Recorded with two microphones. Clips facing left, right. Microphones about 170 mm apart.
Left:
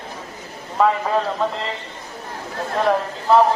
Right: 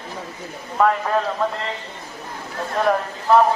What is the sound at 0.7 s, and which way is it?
Speech, 10° left (ahead or behind).